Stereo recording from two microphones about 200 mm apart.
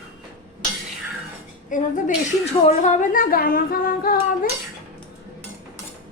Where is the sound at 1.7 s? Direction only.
40° left (ahead or behind).